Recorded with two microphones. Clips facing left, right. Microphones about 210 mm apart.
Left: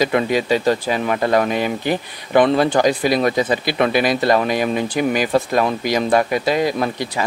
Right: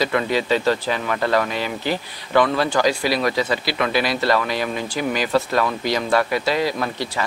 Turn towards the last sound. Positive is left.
turn(degrees=15)  # may be behind; listen again after turning